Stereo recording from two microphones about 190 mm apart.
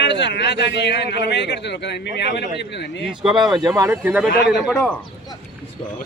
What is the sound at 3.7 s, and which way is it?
Speech, 10° right (ahead or behind).